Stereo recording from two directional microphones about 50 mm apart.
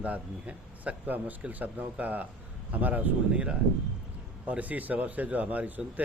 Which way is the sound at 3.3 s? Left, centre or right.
Right.